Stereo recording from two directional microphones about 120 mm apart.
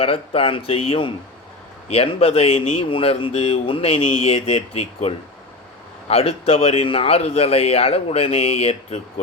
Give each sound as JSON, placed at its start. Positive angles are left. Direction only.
{"t": 0.0, "sound": "a man's voice", "side_deg": 50}